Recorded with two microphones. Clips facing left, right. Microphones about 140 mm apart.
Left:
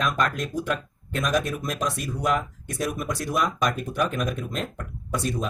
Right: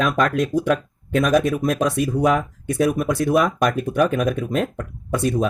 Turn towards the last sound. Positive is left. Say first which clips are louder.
# right 7 dB
turn(degrees=-55)  # may be behind; listen again after turning